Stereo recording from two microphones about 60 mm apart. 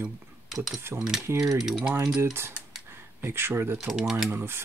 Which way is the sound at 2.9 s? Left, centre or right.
Right.